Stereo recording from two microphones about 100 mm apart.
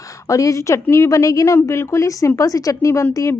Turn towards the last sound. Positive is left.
turn(degrees=30)  # may be behind; listen again after turning